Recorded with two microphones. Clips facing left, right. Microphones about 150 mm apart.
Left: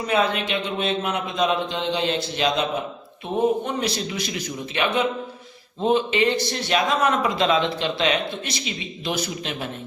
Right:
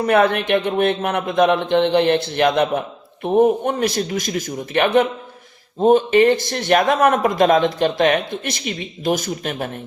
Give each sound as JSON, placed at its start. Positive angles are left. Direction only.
{"t": 0.0, "sound": "a man's voice", "side_deg": -60}